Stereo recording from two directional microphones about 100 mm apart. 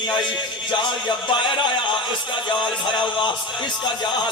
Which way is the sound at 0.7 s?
55° left (ahead or behind).